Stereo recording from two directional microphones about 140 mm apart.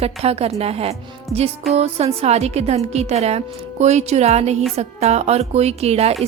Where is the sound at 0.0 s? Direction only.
45° right (ahead or behind).